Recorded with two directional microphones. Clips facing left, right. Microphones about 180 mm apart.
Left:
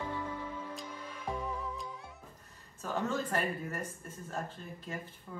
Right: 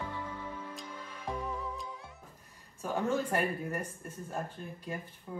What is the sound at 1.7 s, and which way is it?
Music, centre (ahead or behind).